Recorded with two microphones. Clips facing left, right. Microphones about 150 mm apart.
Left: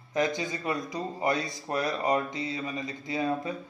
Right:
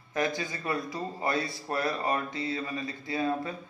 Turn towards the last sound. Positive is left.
turn(degrees=20)  # may be behind; listen again after turning